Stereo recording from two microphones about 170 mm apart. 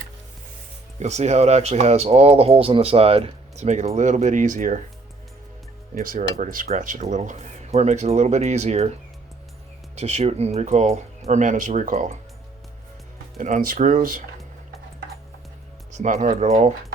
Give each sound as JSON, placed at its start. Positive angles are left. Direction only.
{"t": 0.9, "sound": "speech", "side_deg": -40}
{"t": 5.9, "sound": "speech", "side_deg": -55}
{"t": 9.9, "sound": "speech", "side_deg": -40}
{"t": 13.3, "sound": "speech", "side_deg": -55}
{"t": 15.9, "sound": "speech", "side_deg": -45}